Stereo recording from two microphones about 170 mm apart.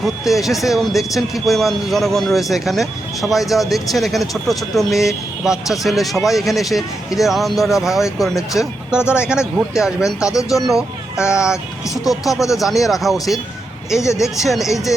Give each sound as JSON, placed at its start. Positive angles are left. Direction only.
{"t": 0.0, "sound": "speech", "side_deg": 0}
{"t": 14.0, "sound": "speech", "side_deg": 20}
{"t": 14.4, "sound": "speech", "side_deg": 0}